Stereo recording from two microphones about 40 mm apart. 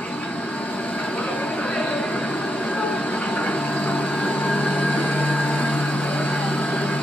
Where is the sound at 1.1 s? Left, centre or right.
Left.